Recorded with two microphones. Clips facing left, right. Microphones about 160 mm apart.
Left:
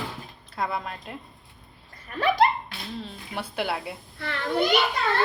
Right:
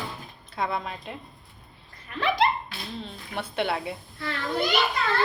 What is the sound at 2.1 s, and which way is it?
Speech, 40° left (ahead or behind).